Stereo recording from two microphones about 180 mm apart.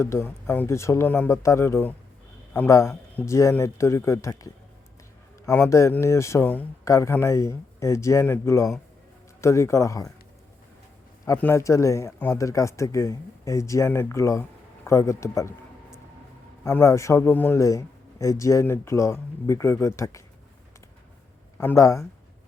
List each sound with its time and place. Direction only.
0.0 s a man's voice: 15° left (ahead or behind)
5.5 s a man's voice: 15° left (ahead or behind)
11.3 s a man's voice: 15° left (ahead or behind)
16.6 s a man's voice: 15° left (ahead or behind)
21.6 s a man's voice: 15° left (ahead or behind)